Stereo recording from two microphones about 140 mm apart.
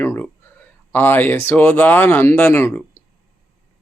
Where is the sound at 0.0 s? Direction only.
15° left (ahead or behind).